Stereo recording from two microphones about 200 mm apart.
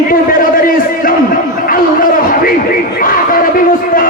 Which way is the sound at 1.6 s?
45° left (ahead or behind).